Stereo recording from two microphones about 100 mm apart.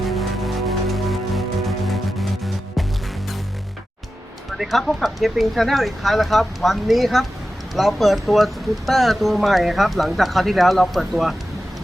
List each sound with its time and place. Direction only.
0.0 s music: centre (ahead or behind)
4.5 s speech: centre (ahead or behind)